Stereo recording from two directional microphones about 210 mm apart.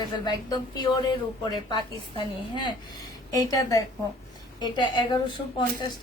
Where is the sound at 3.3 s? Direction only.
15° left (ahead or behind).